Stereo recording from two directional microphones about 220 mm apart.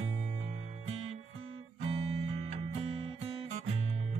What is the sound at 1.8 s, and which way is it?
Guitar, 30° right (ahead or behind).